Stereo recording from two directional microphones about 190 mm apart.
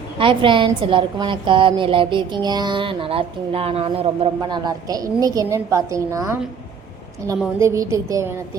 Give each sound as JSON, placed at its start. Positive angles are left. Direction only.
{"t": 0.2, "sound": "a woman's voice", "side_deg": -25}
{"t": 7.6, "sound": "a woman's voice", "side_deg": -15}